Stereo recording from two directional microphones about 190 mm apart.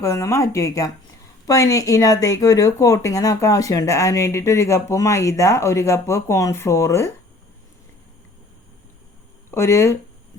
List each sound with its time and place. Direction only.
0.0 s speech: 15° left (ahead or behind)
9.5 s speech: 15° left (ahead or behind)